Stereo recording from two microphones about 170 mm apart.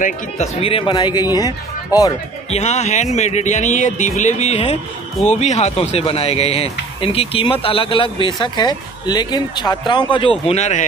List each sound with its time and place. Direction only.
0.0 s a man's voice: 40° left (ahead or behind); by 1.5 s 25° left (ahead or behind)
2.5 s speech: 40° left (ahead or behind)
10.4 s speech: 40° left (ahead or behind)